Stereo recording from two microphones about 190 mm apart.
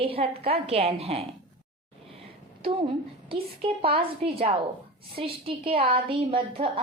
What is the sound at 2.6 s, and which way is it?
A woman's voice, 30° right (ahead or behind).